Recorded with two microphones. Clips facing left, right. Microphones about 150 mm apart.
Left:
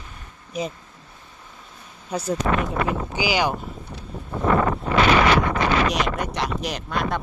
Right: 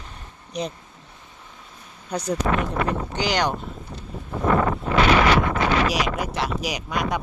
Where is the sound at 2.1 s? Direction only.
5° left (ahead or behind).